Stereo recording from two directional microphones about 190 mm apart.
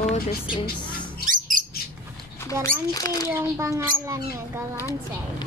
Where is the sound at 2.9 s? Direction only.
20° left (ahead or behind).